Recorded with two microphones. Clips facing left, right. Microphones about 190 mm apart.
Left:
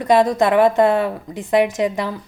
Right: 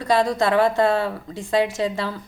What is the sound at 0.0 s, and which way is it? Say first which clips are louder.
A woman's voice: left 5 dB; 20° left (ahead or behind).